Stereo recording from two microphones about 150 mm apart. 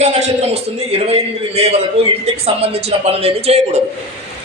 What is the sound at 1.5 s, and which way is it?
Speech, 45° right (ahead or behind).